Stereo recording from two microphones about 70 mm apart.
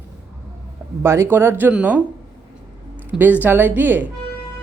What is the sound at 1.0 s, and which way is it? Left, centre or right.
Speech, right.